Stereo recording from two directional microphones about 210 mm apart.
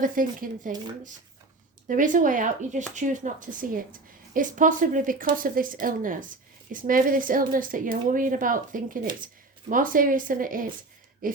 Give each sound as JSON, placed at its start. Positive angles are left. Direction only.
{"t": 0.0, "sound": "a woman's voice", "side_deg": -40}
{"t": 1.9, "sound": "a woman's voice", "side_deg": -40}
{"t": 11.2, "sound": "a sound", "side_deg": -40}